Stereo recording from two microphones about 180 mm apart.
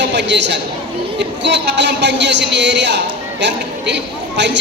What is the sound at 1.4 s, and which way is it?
A woman's voice, 75° right (ahead or behind).